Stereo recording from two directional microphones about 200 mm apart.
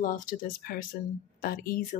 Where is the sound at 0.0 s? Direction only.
40° left (ahead or behind).